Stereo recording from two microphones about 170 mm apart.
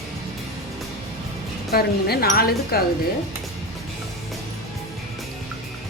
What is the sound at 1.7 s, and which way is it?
Speech, 65° left (ahead or behind).